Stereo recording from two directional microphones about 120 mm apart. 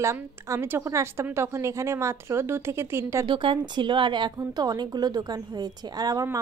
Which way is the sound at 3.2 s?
45° right (ahead or behind).